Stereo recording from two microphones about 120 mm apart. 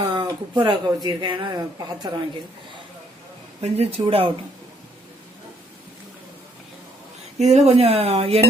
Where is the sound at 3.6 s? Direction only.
60° right (ahead or behind).